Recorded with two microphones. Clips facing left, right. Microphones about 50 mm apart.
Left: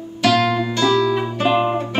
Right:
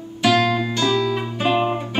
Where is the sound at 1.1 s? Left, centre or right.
Centre.